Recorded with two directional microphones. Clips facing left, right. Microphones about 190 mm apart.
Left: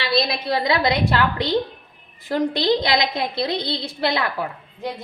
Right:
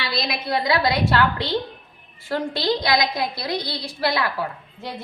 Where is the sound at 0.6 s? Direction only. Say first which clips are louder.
Even; 20° left (ahead or behind).